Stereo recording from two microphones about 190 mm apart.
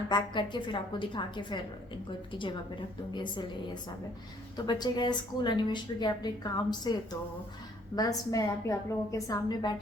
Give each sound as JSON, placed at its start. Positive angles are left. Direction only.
{"t": 0.1, "sound": "a woman's voice", "side_deg": 25}
{"t": 4.5, "sound": "a woman's voice", "side_deg": 20}